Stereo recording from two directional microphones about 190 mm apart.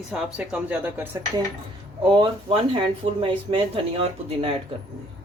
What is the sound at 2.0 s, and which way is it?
Speech, 25° right (ahead or behind).